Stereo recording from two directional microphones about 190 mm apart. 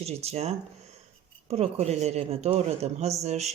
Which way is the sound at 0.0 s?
35° right (ahead or behind).